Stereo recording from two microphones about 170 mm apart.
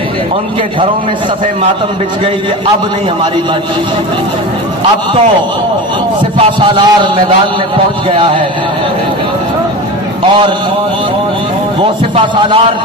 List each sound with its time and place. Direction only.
6.3 s a man's voice: 30° right (ahead or behind)
11.8 s speech: 30° right (ahead or behind)